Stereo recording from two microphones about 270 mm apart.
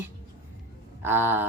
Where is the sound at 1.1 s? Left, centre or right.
Centre.